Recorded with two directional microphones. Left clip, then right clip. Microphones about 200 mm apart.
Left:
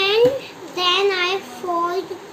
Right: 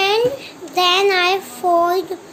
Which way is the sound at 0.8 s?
60° right (ahead or behind).